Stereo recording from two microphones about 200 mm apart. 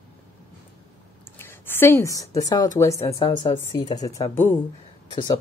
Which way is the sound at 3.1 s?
25° left (ahead or behind).